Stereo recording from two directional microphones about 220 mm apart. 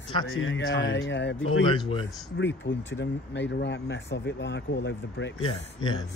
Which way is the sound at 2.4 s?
55° left (ahead or behind).